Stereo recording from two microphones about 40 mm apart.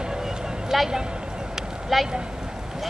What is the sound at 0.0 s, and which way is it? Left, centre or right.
Vehicle, centre.